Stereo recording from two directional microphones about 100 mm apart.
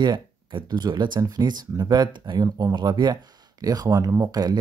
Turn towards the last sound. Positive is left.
turn(degrees=-30)  # may be behind; listen again after turning